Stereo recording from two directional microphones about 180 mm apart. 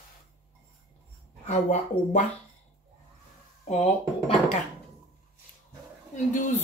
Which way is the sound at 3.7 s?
40° left (ahead or behind).